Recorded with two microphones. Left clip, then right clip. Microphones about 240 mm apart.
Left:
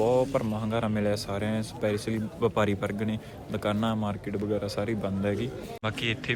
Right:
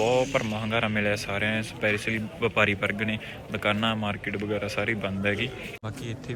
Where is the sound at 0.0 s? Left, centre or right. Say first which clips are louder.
Right 1 dB; centre.